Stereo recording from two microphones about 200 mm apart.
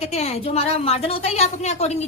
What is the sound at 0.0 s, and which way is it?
A woman's voice, 30° left (ahead or behind).